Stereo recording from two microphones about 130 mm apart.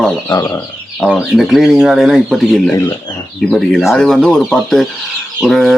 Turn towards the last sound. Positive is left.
turn(degrees=0)  # may be behind; listen again after turning